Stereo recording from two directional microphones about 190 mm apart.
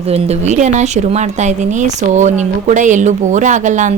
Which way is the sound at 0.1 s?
35° right (ahead or behind).